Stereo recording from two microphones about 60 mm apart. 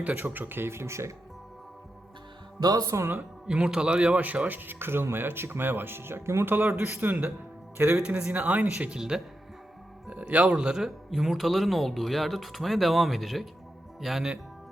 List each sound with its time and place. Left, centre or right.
0.2 s speech: right
2.7 s speech: right
3.4 s speech: centre
9.0 s speech: centre
10.1 s speech: right; by 14.3 s centre